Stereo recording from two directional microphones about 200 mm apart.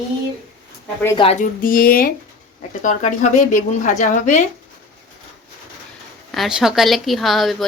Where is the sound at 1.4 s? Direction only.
45° left (ahead or behind).